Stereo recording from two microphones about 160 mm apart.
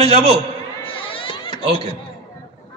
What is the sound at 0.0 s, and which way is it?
Speech, 40° right (ahead or behind).